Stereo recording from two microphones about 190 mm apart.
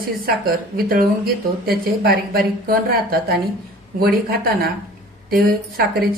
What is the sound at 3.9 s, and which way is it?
Speech, 50° right (ahead or behind).